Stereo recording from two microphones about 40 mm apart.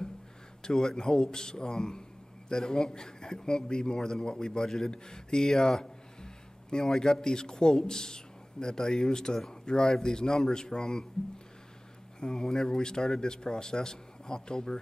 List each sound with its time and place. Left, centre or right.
0.6 s speech: centre
12.2 s speech: centre